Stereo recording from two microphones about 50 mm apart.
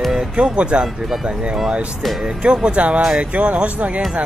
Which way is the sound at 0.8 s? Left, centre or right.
Centre.